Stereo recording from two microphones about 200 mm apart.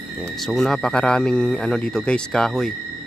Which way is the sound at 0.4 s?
Centre (ahead or behind).